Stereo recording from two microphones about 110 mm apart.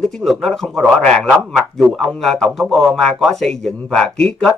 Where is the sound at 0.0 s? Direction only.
Centre (ahead or behind).